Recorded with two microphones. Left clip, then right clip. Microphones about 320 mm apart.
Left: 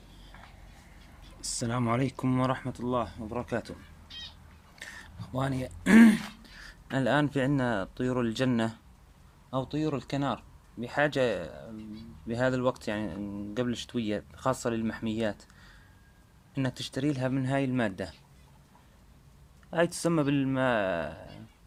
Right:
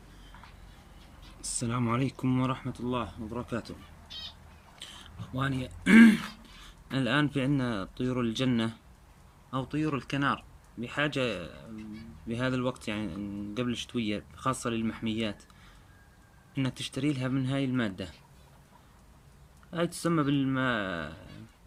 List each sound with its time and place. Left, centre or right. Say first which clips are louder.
1.4 s speech: left 1 dB; centre
4.8 s a sound: left 2 dB; centre
5.8 s speech: right 1 dB; centre
16.6 s speech: left 1 dB; centre
19.7 s speech: left 3 dB; centre